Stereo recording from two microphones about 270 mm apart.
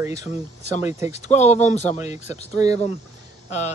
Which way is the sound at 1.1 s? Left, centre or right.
Left.